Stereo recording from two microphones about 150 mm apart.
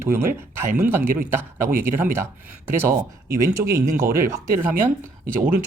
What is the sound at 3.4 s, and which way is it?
Speech, 20° right (ahead or behind).